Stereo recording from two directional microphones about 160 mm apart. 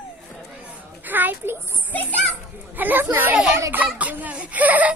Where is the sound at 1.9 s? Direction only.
10° left (ahead or behind).